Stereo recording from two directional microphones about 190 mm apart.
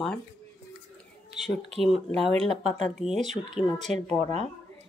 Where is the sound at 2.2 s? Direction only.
30° right (ahead or behind).